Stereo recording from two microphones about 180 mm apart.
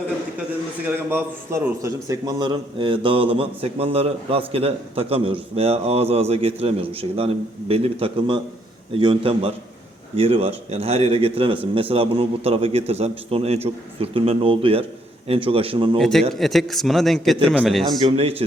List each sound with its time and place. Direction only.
0.9 s a man's voice: 10° right (ahead or behind); by 16.0 s 30° right (ahead or behind)
16.0 s a man's voice: 5° left (ahead or behind)
18.0 s a man's voice: 30° right (ahead or behind)